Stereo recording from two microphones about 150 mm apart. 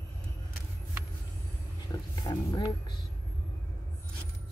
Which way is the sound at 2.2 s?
30° left (ahead or behind).